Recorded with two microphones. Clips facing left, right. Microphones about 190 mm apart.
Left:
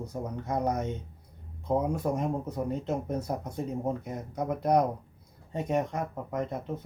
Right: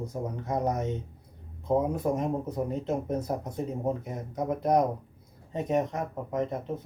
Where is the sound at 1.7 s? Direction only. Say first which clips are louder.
Right 2 dB; centre (ahead or behind).